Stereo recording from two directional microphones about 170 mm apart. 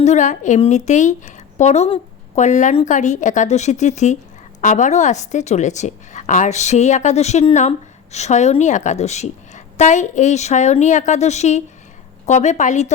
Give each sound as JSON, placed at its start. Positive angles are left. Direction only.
{"t": 0.0, "sound": "a woman's voice", "side_deg": 45}